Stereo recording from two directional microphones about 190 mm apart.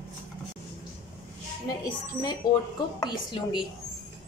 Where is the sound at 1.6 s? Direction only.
20° left (ahead or behind).